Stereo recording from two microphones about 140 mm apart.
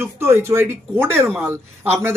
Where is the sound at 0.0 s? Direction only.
15° right (ahead or behind).